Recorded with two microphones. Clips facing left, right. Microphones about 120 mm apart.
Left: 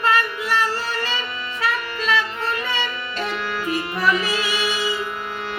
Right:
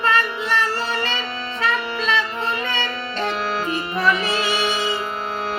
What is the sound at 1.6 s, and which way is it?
Music, 10° left (ahead or behind).